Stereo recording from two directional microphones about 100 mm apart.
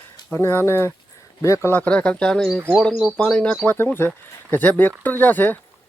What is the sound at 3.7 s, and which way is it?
Speech, 20° left (ahead or behind).